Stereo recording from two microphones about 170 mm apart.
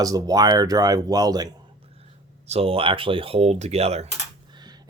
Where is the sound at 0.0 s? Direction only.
20° right (ahead or behind).